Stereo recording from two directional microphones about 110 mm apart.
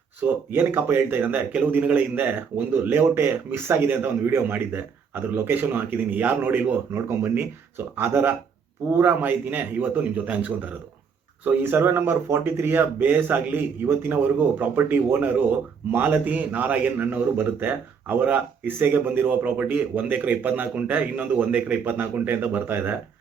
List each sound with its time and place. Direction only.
0.2 s a man's voice: 20° right (ahead or behind)